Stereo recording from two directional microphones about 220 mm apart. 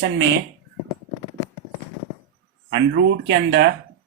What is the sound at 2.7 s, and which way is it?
Speech, 50° right (ahead or behind).